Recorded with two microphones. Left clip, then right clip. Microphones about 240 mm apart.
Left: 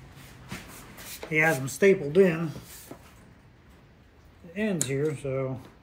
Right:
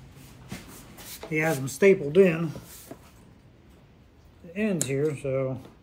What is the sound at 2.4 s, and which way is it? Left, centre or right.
Speech, centre.